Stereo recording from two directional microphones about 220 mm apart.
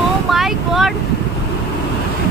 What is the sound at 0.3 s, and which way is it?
Vehicle, centre (ahead or behind).